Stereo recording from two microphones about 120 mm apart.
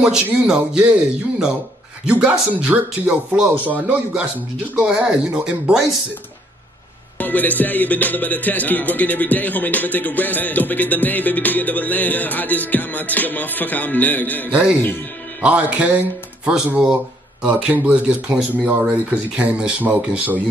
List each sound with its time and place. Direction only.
0.0 s speech: 5° right (ahead or behind)
7.2 s music: 15° left (ahead or behind)
14.5 s speech: 10° right (ahead or behind)